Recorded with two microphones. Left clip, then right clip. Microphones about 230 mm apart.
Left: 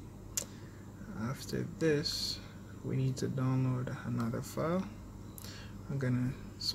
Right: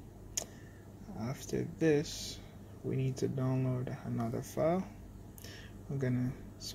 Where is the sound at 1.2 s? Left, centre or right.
Centre.